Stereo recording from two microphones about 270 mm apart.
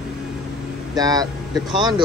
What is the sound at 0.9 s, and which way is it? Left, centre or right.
Speech, centre.